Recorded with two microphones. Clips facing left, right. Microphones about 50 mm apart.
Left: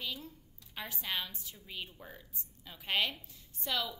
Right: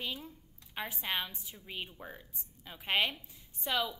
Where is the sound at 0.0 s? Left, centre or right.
Right.